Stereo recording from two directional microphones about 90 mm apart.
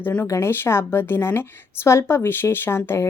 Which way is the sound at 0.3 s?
30° left (ahead or behind).